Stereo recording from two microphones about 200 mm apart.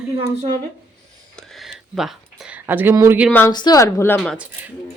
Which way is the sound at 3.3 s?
10° left (ahead or behind).